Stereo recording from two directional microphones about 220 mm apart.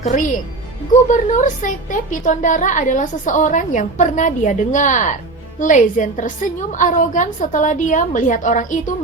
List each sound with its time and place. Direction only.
0.0 s a woman's voice: 35° left (ahead or behind)